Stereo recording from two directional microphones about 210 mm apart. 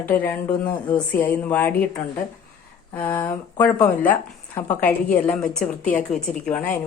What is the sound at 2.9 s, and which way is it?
Speech, 10° left (ahead or behind).